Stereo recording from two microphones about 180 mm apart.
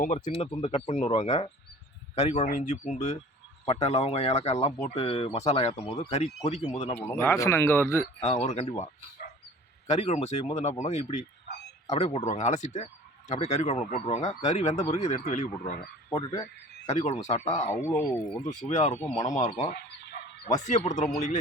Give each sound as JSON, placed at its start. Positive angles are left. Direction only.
{"t": 0.3, "sound": "speech", "side_deg": 30}
{"t": 7.0, "sound": "speech", "side_deg": 15}
{"t": 8.2, "sound": "speech", "side_deg": 40}
{"t": 9.8, "sound": "speech", "side_deg": 40}
{"t": 16.0, "sound": "speech", "side_deg": 20}
{"t": 16.8, "sound": "speech", "side_deg": 40}
{"t": 17.7, "sound": "speech", "side_deg": 15}
{"t": 18.7, "sound": "speech", "side_deg": 40}
{"t": 19.7, "sound": "dog", "side_deg": 60}
{"t": 20.7, "sound": "speech", "side_deg": 40}